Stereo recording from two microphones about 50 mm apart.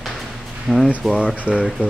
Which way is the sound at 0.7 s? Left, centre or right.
Centre.